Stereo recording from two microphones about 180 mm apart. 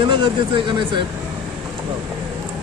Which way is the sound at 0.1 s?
25° right (ahead or behind).